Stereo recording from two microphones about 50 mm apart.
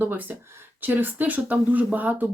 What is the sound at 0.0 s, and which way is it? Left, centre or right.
Speech, right.